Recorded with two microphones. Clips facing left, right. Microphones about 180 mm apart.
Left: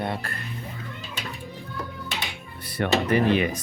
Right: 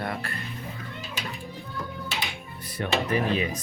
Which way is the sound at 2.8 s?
70° left (ahead or behind).